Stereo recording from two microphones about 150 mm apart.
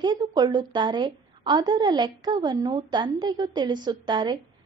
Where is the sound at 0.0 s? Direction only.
25° right (ahead or behind).